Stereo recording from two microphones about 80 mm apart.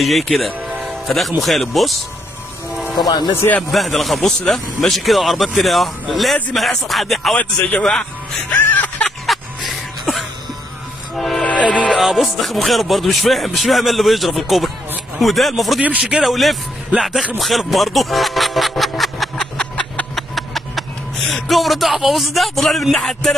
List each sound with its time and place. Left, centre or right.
0.0 s speech: centre
3.7 s speech: centre
8.5 s music: left
9.2 s music: centre
11.1 s train: centre
11.4 s train: centre
12.0 s speech: centre
17.4 s a sound: centre